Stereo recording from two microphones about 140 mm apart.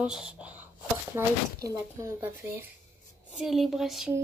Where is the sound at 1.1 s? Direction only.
20° right (ahead or behind).